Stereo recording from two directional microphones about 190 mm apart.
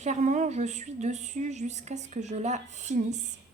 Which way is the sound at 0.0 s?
40° right (ahead or behind).